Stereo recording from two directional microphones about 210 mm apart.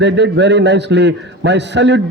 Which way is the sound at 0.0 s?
55° right (ahead or behind).